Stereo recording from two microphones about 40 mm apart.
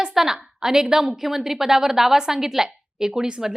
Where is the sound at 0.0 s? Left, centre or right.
Centre.